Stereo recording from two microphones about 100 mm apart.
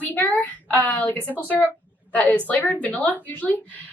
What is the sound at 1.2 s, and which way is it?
Speech, 15° right (ahead or behind).